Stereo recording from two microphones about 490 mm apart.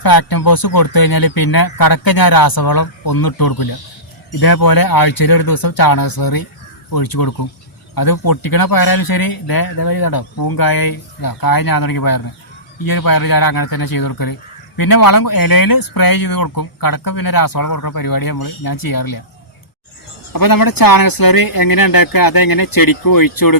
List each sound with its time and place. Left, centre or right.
0.0 s speech: left
20.3 s speech: left